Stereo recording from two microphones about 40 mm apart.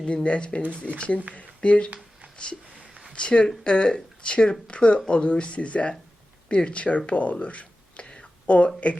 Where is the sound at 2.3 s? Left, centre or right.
Left.